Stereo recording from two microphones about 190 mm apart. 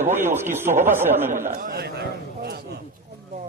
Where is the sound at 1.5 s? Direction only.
55° right (ahead or behind).